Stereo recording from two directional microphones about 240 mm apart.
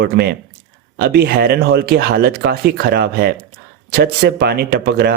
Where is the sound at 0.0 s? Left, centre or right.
Right.